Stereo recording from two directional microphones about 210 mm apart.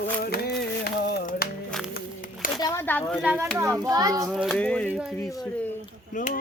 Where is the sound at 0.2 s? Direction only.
45° left (ahead or behind).